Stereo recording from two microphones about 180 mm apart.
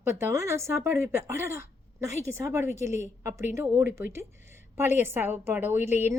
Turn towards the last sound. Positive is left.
turn(degrees=-15)  # may be behind; listen again after turning